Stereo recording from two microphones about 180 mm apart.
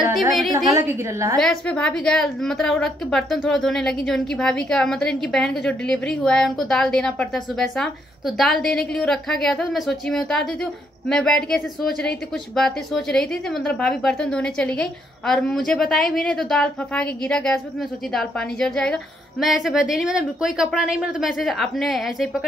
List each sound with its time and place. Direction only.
0.7 s a woman's voice: 15° right (ahead or behind)
1.4 s a woman's voice: centre (ahead or behind)